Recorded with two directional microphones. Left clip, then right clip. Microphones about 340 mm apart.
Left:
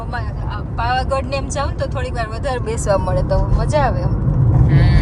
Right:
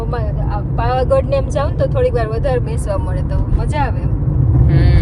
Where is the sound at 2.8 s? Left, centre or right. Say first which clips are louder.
Left 5 dB; left.